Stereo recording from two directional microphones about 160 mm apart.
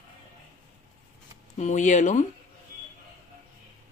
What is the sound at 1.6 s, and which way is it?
Speech, 50° left (ahead or behind).